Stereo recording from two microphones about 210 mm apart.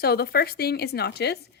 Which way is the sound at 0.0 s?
45° left (ahead or behind).